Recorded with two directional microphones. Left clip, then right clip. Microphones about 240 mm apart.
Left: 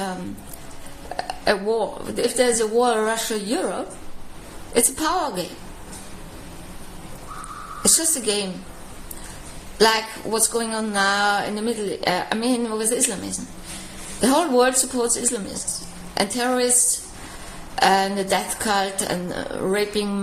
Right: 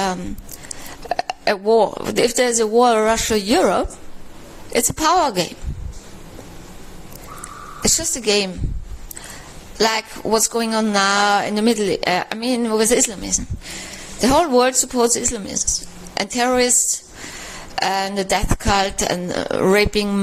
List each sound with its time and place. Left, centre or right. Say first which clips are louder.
1.1 s speech: right 2 dB; right
7.9 s speech: right 3 dB; right
9.7 s speech: left 1 dB; right
17.7 s speech: left 2 dB; right